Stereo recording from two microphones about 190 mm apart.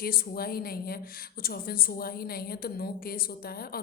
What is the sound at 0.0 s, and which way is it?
A woman's voice, 50° left (ahead or behind).